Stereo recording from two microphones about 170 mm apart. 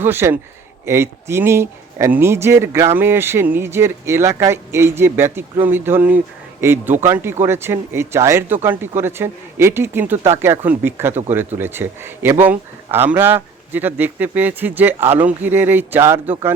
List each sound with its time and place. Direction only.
0.0 s a man's voice: 15° right (ahead or behind)